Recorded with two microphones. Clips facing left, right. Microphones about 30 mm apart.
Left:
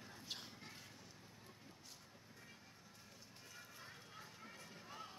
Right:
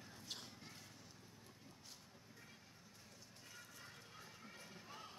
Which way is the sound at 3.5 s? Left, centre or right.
Centre.